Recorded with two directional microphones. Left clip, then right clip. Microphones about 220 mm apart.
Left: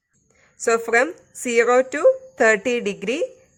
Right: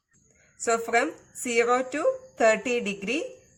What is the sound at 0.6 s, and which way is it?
A woman's voice, 45° left (ahead or behind).